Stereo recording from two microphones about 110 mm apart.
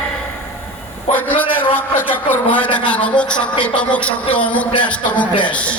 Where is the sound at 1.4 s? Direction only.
15° left (ahead or behind).